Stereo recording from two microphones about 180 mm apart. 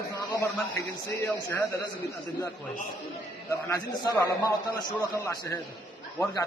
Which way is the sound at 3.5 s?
15° left (ahead or behind).